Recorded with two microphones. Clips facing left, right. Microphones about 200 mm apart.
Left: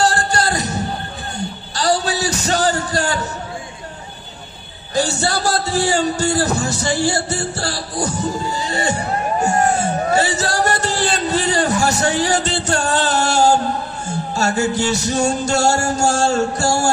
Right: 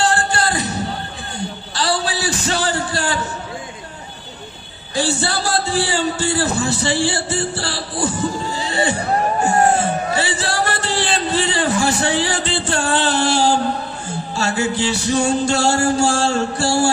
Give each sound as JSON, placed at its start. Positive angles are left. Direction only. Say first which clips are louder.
{"t": 0.0, "sound": "a sound", "louder": "left 1 dB", "side_deg": 40}
{"t": 1.8, "sound": "a man's voice", "louder": "left 3 dB", "side_deg": 40}
{"t": 4.9, "sound": "speech", "louder": "left 1 dB", "side_deg": 40}